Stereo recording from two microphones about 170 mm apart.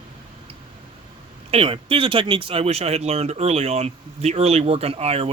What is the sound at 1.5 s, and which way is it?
Speech, 30° right (ahead or behind).